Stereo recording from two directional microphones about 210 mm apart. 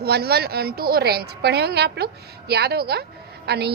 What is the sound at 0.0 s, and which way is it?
A woman's voice, 50° right (ahead or behind).